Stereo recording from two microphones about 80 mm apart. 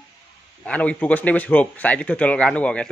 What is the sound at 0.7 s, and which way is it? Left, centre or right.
A man's voice, centre.